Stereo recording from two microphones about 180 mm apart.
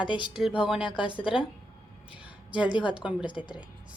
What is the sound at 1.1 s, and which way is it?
Speech, 30° left (ahead or behind).